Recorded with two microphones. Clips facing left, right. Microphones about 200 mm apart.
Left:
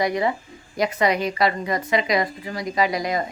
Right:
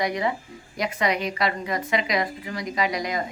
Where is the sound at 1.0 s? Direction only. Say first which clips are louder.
Left 3 dB; centre (ahead or behind).